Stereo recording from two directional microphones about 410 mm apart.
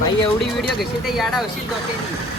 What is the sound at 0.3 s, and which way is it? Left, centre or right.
Speech, centre.